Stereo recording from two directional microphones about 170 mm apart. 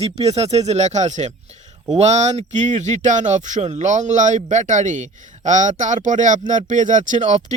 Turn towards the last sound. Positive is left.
turn(degrees=-45)  # may be behind; listen again after turning